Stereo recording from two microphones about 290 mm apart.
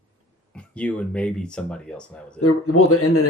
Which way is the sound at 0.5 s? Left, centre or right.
Centre.